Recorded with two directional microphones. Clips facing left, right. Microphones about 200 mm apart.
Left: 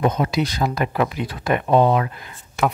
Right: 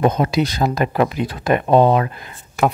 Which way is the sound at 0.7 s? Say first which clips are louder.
Right 4 dB; 40° right (ahead or behind).